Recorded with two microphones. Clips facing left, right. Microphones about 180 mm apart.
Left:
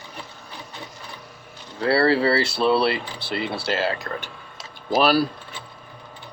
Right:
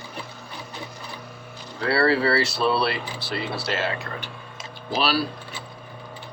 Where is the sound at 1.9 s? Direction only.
30° left (ahead or behind); by 5.2 s 50° left (ahead or behind).